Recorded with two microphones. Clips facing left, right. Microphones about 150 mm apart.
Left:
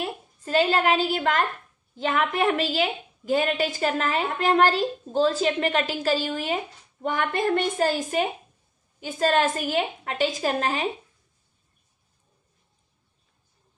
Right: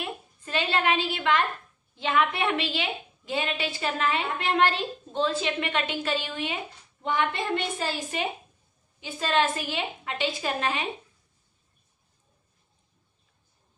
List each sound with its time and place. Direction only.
0.0 s a woman's voice: 40° left (ahead or behind)